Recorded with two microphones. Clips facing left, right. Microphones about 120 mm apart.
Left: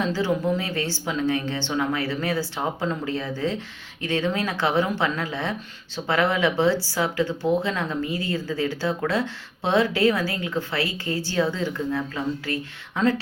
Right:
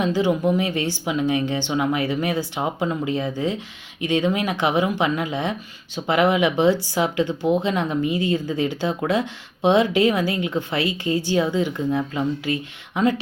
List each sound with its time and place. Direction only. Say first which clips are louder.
0.0 s speech: right 4 dB; 15° right (ahead or behind)